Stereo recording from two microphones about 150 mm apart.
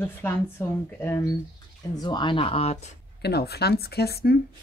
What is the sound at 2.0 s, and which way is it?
Speech, 30° left (ahead or behind).